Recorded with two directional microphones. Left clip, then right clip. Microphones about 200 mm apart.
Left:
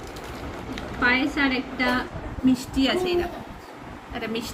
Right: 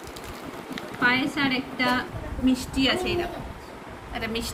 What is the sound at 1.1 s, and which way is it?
A woman's voice, 20° right (ahead or behind).